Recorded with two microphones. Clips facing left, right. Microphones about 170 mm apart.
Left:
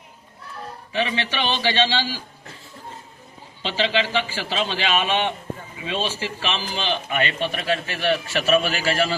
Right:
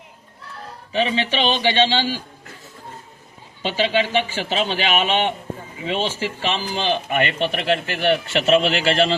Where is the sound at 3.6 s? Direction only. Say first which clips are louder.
Right 3 dB; 15° right (ahead or behind).